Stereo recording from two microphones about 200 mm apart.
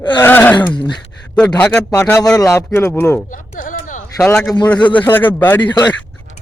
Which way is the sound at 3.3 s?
40° left (ahead or behind).